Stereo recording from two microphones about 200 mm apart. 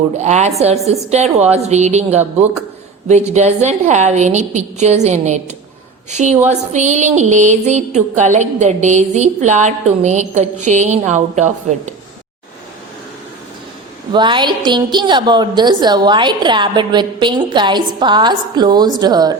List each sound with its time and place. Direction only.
0.2 s music: 35° right (ahead or behind)
14.1 s a woman's voice: 25° right (ahead or behind)